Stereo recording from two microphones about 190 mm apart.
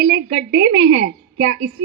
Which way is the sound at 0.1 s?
60° right (ahead or behind).